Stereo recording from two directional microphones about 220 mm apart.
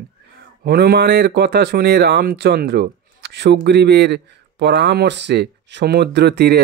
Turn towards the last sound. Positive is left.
turn(degrees=-50)  # may be behind; listen again after turning